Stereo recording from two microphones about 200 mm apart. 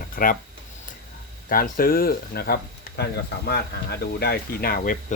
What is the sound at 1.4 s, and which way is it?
Speech, 45° left (ahead or behind).